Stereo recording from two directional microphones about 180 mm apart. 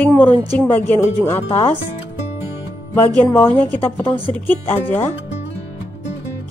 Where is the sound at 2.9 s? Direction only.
10° left (ahead or behind).